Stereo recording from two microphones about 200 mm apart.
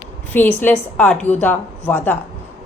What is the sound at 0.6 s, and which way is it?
A woman's voice, 10° left (ahead or behind).